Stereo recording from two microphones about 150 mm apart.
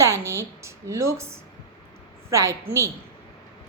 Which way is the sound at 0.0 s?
20° right (ahead or behind).